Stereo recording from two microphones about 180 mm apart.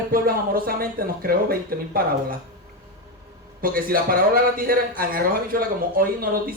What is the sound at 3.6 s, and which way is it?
Speech, 55° right (ahead or behind).